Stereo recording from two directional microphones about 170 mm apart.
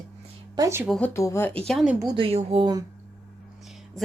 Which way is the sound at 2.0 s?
25° right (ahead or behind).